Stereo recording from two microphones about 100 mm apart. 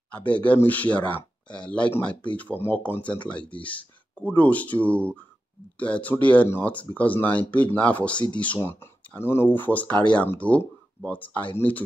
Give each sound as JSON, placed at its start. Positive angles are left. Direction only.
{"t": 0.1, "sound": "speech", "side_deg": 15}